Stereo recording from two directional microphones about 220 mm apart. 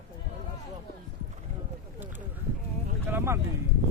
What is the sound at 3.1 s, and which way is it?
Clip-clop, 10° right (ahead or behind).